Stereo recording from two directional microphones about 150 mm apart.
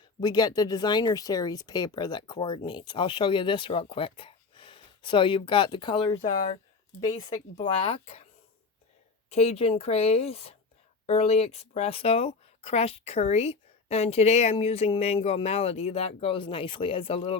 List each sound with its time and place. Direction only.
0.2 s speech: 25° left (ahead or behind)
9.3 s speech: 45° left (ahead or behind)